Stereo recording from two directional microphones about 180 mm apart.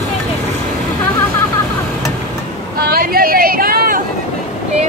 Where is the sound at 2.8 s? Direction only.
55° right (ahead or behind).